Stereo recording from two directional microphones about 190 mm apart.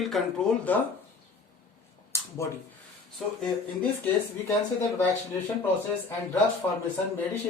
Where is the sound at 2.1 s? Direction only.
15° left (ahead or behind).